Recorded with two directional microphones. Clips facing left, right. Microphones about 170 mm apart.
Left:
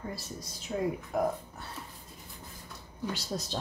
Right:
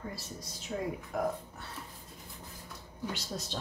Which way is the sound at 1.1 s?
40° left (ahead or behind).